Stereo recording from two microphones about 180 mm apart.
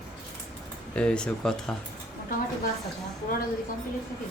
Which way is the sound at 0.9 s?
5° left (ahead or behind).